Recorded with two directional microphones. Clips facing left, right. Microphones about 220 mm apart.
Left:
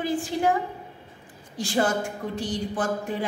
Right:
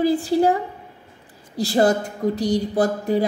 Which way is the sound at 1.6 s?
35° right (ahead or behind).